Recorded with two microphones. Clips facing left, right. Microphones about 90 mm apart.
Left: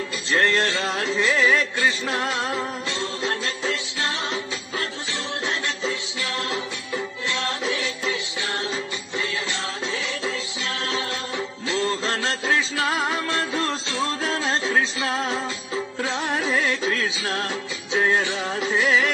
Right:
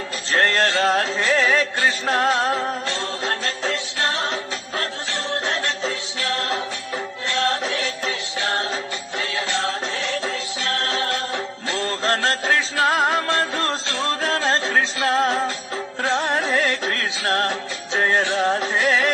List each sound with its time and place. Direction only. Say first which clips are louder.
0.3 s music: right 2 dB; 50° right (ahead or behind)
18.8 s carnatic music: left 2 dB; 50° right (ahead or behind)